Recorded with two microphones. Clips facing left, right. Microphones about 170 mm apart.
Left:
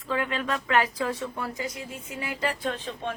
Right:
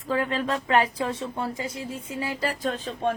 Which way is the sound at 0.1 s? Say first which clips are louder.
Right 3 dB; 35° right (ahead or behind).